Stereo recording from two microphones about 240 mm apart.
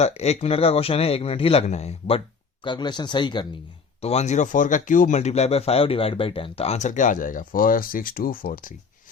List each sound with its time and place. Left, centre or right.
0.0 s speech: left